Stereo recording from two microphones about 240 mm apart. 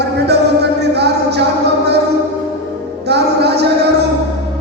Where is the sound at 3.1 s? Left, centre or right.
Right.